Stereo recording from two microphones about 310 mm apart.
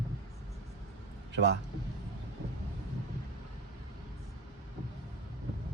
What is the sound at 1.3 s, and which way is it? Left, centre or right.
Speech, right.